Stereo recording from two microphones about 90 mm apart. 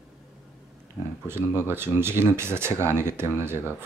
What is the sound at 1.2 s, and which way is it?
Speech, 25° right (ahead or behind).